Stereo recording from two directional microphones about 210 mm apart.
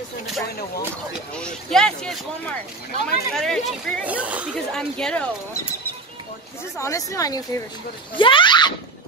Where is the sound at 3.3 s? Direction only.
Centre (ahead or behind).